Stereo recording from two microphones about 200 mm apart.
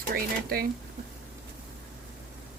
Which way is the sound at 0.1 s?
45° right (ahead or behind).